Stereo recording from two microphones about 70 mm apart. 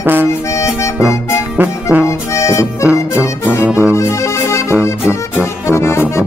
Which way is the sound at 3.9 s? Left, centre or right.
Left.